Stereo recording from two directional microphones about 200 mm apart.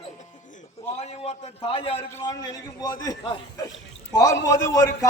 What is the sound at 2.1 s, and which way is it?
Speech, 15° left (ahead or behind).